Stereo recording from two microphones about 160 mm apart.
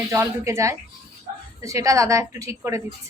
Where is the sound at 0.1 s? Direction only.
20° right (ahead or behind).